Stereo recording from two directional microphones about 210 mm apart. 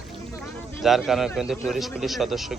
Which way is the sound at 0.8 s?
Centre (ahead or behind).